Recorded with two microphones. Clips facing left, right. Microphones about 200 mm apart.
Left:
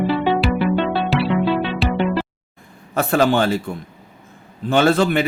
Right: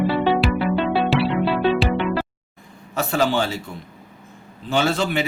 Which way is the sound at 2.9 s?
55° left (ahead or behind).